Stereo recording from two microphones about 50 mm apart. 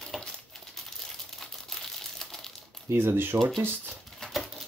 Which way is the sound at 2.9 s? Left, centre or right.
Right.